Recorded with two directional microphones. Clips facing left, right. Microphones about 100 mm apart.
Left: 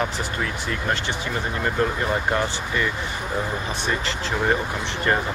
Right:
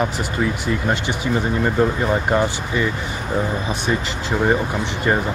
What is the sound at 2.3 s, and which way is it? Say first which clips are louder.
Speech: right 4 dB; 15° right (ahead or behind).